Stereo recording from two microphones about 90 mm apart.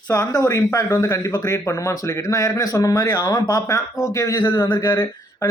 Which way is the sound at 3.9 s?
30° left (ahead or behind).